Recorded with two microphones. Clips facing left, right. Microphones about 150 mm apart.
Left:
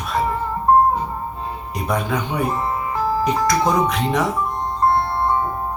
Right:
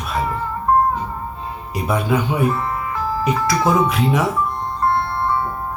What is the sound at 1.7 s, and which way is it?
Speech, 5° right (ahead or behind).